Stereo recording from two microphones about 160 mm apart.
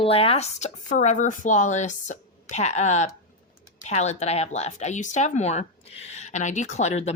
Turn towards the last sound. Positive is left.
turn(degrees=45)  # may be behind; listen again after turning